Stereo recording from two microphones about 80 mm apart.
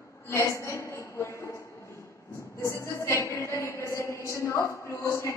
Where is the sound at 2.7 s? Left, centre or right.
Left.